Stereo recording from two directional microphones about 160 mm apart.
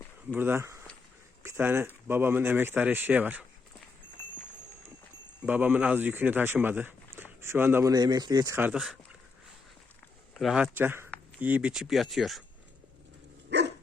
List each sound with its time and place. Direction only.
0.3 s speech: 15° right (ahead or behind)
1.4 s a sound: 15° right (ahead or behind)
2.0 s speech: 15° right (ahead or behind)
5.5 s speech: 10° right (ahead or behind)
10.3 s speech: 5° right (ahead or behind)
13.5 s dog: 90° right